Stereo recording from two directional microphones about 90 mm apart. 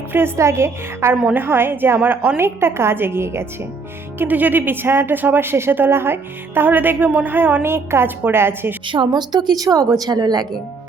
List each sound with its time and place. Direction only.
0.1 s speech: 30° right (ahead or behind)
8.9 s a woman's voice: 60° right (ahead or behind)